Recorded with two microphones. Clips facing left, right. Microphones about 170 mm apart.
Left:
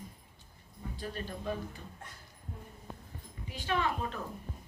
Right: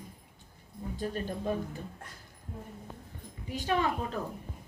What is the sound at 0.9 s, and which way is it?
Speech, 45° right (ahead or behind).